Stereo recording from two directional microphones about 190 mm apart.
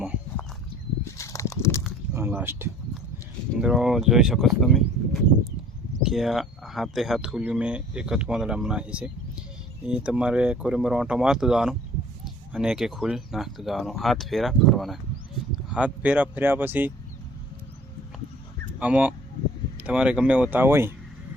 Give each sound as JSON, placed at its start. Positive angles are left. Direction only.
{"t": 1.0, "sound": "horse", "side_deg": 15}
{"t": 2.1, "sound": "speech", "side_deg": -10}
{"t": 18.8, "sound": "speech", "side_deg": -10}